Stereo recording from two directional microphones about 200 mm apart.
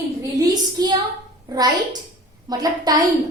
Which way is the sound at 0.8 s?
20° right (ahead or behind).